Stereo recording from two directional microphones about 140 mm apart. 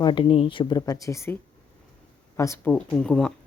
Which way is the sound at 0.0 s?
35° left (ahead or behind).